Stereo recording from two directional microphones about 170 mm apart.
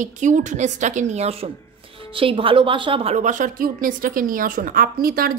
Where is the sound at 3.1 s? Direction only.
50° right (ahead or behind).